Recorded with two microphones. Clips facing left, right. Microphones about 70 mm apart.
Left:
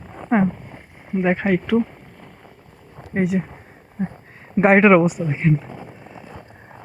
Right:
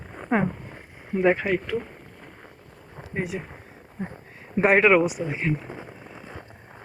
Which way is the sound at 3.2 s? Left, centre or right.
Left.